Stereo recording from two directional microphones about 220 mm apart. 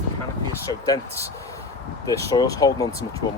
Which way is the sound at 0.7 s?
15° left (ahead or behind).